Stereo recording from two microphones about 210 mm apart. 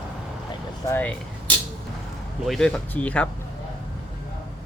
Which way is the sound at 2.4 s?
Centre (ahead or behind).